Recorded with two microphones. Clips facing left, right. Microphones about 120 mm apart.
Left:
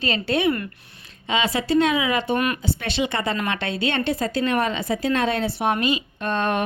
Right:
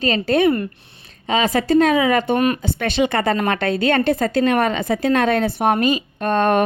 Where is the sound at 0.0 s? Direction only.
45° right (ahead or behind).